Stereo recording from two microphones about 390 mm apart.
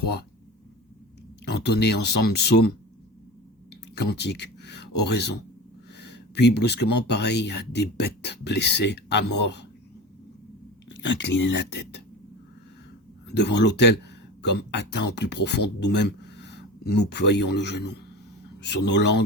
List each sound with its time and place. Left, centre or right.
0.0 s speech: left
1.5 s speech: left
4.1 s speech: left
10.8 s speech: left
13.2 s speech: left